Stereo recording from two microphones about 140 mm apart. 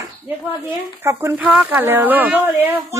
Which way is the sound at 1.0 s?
15° right (ahead or behind).